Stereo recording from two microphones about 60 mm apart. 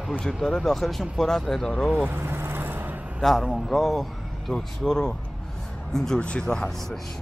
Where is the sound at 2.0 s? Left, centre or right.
Right.